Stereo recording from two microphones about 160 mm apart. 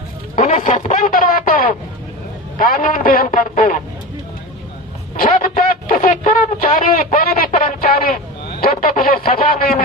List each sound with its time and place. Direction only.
0.3 s a sound: 50° left (ahead or behind)
2.6 s a man's voice: 60° left (ahead or behind)
5.1 s speech: 60° left (ahead or behind)